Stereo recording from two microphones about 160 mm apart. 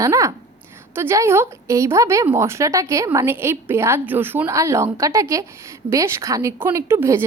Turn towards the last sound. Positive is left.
turn(degrees=-15)  # may be behind; listen again after turning